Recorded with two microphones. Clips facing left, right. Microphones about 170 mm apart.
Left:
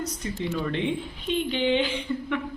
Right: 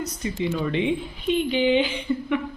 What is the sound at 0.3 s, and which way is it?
Speech, 5° right (ahead or behind).